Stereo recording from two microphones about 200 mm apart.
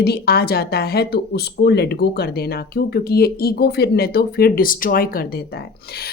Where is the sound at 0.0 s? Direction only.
50° left (ahead or behind).